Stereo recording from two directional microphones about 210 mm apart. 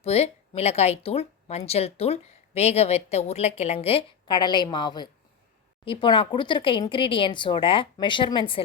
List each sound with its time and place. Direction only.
0.0 s speech: 30° left (ahead or behind)